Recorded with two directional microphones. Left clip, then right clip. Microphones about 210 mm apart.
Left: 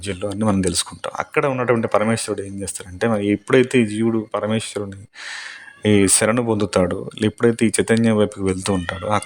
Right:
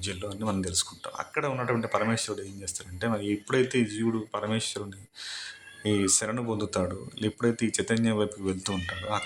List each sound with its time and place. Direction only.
0.0 s speech: 30° left (ahead or behind)
5.8 s speech: 40° left (ahead or behind)